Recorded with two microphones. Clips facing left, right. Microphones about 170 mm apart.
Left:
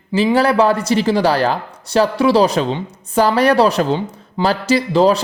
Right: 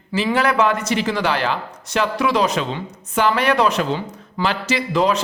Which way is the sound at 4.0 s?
25° left (ahead or behind).